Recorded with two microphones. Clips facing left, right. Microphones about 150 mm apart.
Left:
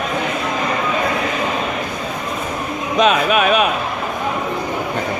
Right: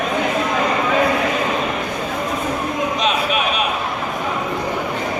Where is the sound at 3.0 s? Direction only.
55° left (ahead or behind).